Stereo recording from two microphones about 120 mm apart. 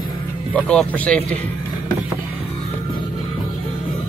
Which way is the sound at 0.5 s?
10° left (ahead or behind).